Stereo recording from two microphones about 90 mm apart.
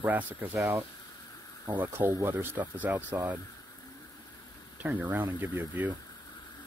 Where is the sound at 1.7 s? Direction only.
20° right (ahead or behind).